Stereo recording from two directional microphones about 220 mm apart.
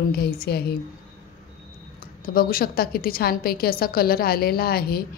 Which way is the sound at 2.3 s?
40° left (ahead or behind).